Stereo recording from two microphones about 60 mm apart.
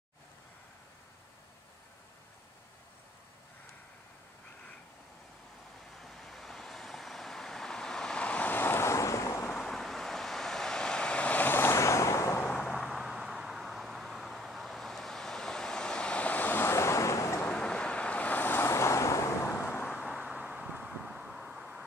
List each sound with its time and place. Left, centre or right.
5.9 s vehicle: centre
8.5 s waves: left
9.6 s vehicle: centre; by 11.5 s left
11.5 s waves: left
12.4 s vehicle: centre
12.7 s vehicle: centre; by 17.4 s left
17.5 s vehicle: centre; by 18.7 s left
18.7 s vehicle: left
19.5 s vehicle: left
20.0 s vehicle: centre
20.2 s vehicle: centre
20.5 s vehicle: right
20.8 s vehicle: centre